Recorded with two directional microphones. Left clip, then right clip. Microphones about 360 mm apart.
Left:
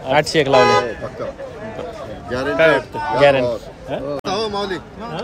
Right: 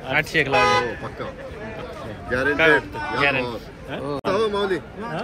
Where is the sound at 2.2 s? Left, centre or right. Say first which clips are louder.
Left 3 dB; left.